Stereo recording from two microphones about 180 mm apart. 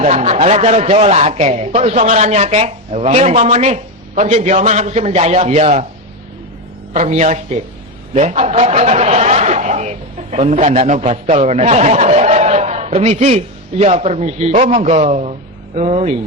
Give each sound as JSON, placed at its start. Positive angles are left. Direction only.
{"t": 0.0, "sound": "a man's voice", "side_deg": -40}
{"t": 6.9, "sound": "a man's voice", "side_deg": -40}